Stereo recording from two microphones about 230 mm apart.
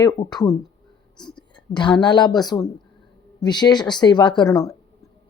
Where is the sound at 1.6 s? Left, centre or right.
Centre.